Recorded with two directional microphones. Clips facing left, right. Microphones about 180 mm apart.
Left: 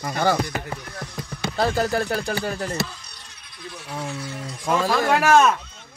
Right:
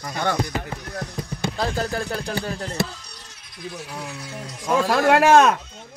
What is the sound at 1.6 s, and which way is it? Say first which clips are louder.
A man's voice: left 5 dB; centre (ahead or behind).